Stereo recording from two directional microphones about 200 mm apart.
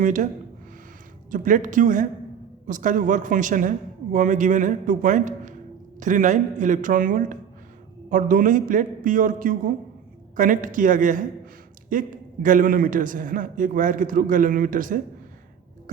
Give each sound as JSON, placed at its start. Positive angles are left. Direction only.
{"t": 0.0, "sound": "a man's voice", "side_deg": -40}
{"t": 1.3, "sound": "a man's voice", "side_deg": -40}